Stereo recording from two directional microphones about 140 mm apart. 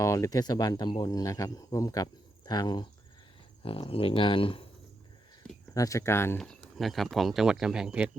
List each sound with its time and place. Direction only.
0.0 s speech: 20° left (ahead or behind)
3.6 s speech: 40° left (ahead or behind)
5.7 s speech: 25° left (ahead or behind)
6.4 s speech: centre (ahead or behind)